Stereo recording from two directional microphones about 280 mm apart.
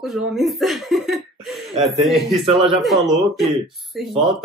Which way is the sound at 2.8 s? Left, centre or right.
Centre.